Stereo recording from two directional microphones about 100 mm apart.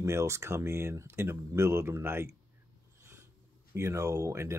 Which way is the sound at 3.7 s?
30° right (ahead or behind).